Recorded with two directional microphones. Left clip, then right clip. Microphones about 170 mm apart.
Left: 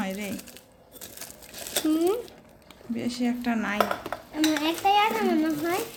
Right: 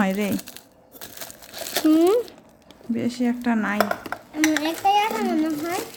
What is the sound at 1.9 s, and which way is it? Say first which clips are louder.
Speech: right 8 dB; 40° right (ahead or behind).